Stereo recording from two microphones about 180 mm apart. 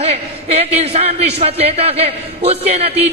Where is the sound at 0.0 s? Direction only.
35° right (ahead or behind).